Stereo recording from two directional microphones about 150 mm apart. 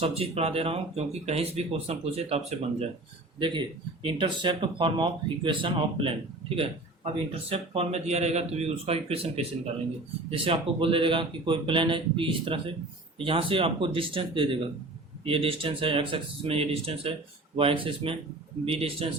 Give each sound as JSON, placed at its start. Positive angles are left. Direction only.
{"t": 0.0, "sound": "speech", "side_deg": -40}
{"t": 3.4, "sound": "speech", "side_deg": -30}
{"t": 7.5, "sound": "speech", "side_deg": -40}